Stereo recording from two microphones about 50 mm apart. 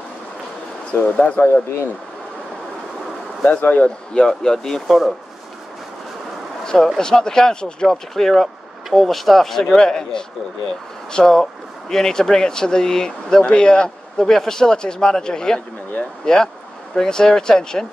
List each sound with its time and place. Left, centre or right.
1.1 s speech: left
3.4 s speech: left
4.1 s a man's voice: centre
4.8 s speech: centre
6.6 s a sound: centre
7.0 s a man's voice: centre
9.8 s a man's voice: centre